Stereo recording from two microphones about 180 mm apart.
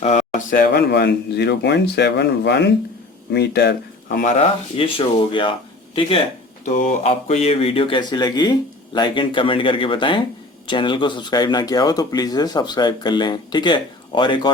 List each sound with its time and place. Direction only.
0.0 s speech: 40° left (ahead or behind); by 4.2 s 65° left (ahead or behind)
4.2 s speech: 35° left (ahead or behind)